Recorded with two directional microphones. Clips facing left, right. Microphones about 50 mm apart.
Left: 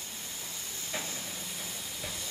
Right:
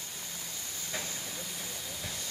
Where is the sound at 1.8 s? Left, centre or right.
Left.